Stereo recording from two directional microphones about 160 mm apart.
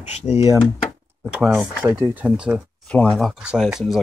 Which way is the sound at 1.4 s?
5° right (ahead or behind).